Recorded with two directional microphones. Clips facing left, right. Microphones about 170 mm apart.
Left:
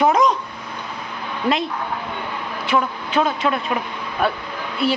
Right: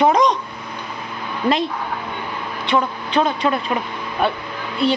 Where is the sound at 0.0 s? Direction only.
5° left (ahead or behind).